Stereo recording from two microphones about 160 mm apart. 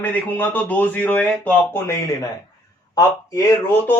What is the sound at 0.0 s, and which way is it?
Speech, 10° left (ahead or behind).